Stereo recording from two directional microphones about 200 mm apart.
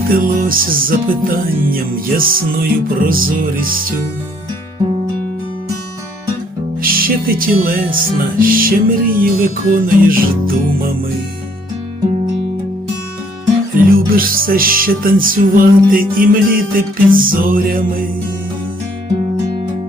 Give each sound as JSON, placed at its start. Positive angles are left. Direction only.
{"t": 0.1, "sound": "music", "side_deg": -45}
{"t": 6.8, "sound": "music", "side_deg": -45}
{"t": 13.8, "sound": "music", "side_deg": -45}